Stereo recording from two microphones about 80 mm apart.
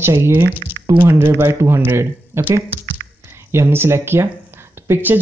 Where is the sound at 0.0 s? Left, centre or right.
Right.